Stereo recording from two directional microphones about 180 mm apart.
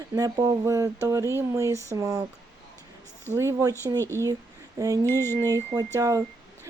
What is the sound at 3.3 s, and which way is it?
Speech, 15° right (ahead or behind).